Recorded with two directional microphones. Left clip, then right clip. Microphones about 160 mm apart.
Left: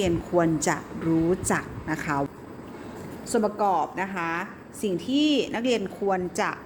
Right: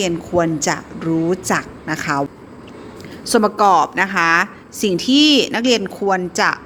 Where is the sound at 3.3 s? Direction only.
40° right (ahead or behind).